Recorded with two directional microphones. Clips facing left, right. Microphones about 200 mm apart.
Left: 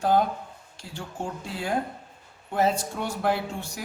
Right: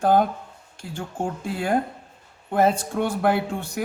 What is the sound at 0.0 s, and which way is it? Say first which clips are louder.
Speech: right 3 dB; 55° right (ahead or behind).